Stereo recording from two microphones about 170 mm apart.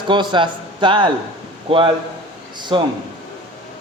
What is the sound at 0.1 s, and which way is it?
A man's voice, 30° right (ahead or behind).